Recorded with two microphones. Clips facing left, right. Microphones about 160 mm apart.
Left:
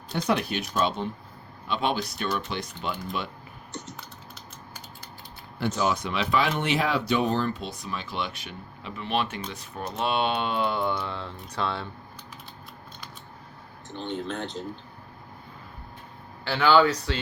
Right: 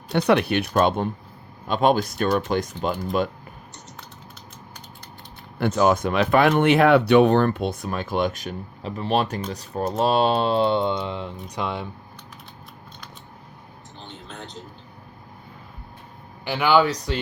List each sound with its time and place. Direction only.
0.1 s speech: 70° right (ahead or behind); by 3.2 s 45° right (ahead or behind)
5.5 s speech: 55° right (ahead or behind); by 11.9 s 15° right (ahead or behind)
16.4 s speech: 15° right (ahead or behind)